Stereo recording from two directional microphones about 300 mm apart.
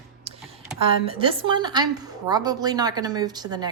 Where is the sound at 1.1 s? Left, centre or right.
Centre.